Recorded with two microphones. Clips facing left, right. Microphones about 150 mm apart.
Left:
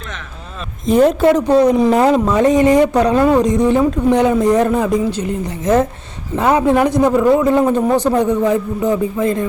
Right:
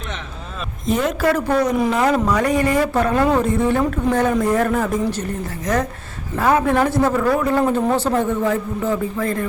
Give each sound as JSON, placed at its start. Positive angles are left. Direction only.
{"t": 1.2, "sound": "speech", "side_deg": 20}
{"t": 1.9, "sound": "speech", "side_deg": 35}
{"t": 2.1, "sound": "speech", "side_deg": 20}
{"t": 5.6, "sound": "a man's voice", "side_deg": 25}